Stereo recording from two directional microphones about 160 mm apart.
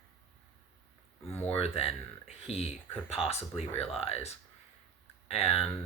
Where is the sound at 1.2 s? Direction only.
15° left (ahead or behind).